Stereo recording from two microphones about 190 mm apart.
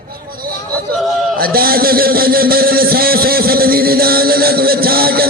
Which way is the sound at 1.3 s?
50° right (ahead or behind).